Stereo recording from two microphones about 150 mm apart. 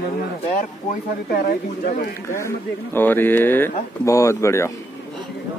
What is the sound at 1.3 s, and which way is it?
Speech, 70° left (ahead or behind).